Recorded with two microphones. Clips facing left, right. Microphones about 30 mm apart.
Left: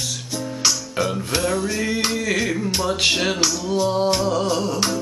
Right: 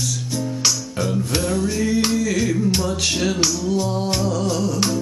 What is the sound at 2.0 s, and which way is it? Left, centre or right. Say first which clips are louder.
Speech: right 1 dB; left.